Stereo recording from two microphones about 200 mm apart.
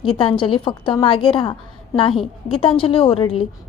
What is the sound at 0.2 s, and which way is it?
A woman's voice, 25° left (ahead or behind).